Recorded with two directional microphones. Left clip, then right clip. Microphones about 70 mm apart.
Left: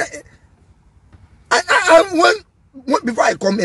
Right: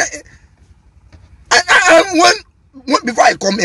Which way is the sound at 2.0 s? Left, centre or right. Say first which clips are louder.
Right 3 dB; left.